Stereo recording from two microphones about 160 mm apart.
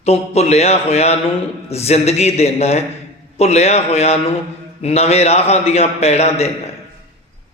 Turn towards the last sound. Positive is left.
turn(degrees=40)  # may be behind; listen again after turning